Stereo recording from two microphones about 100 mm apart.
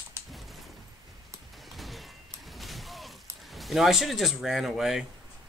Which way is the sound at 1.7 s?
Centre (ahead or behind).